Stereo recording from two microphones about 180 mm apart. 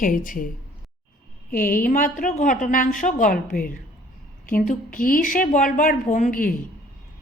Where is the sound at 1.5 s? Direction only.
50° left (ahead or behind).